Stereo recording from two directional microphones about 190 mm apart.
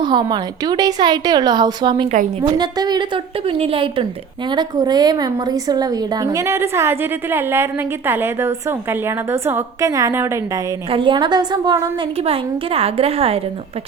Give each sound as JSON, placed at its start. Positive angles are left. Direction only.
{"t": 0.0, "sound": "a woman's voice", "side_deg": -20}
{"t": 10.9, "sound": "a woman's voice", "side_deg": -25}